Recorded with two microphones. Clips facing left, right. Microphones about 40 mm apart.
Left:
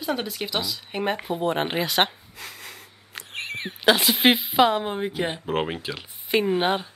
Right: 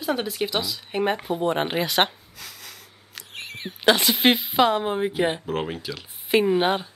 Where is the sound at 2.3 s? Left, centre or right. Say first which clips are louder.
Left 2 dB; left.